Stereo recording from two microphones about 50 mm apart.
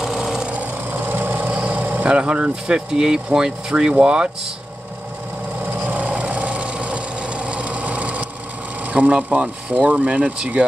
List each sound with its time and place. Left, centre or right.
0.0 s sewing machine: centre
0.8 s ratchet: right
1.5 s vehicle: right
2.0 s speech: centre
5.9 s a sound: right
8.9 s speech: right